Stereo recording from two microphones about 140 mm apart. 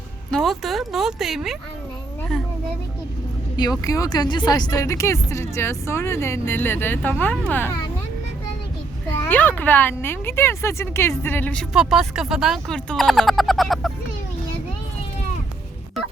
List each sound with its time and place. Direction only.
0.3 s speech: centre (ahead or behind)
3.6 s speech: 25° left (ahead or behind)
9.2 s speech: 15° left (ahead or behind)
11.7 s speech: 5° right (ahead or behind)